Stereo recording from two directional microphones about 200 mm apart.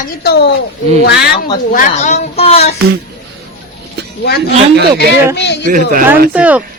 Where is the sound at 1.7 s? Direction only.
40° left (ahead or behind).